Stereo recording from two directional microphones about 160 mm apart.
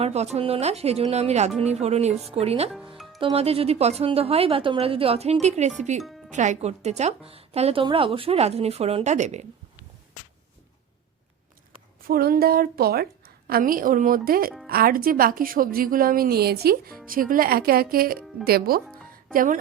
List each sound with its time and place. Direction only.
0.0 s a woman's voice: 40° right (ahead or behind)
2.7 s music: centre (ahead or behind)
3.3 s a woman's voice: 40° right (ahead or behind)
11.9 s a woman's voice: 70° right (ahead or behind)
17.1 s a woman's voice: 60° right (ahead or behind)
19.3 s speech: 60° right (ahead or behind)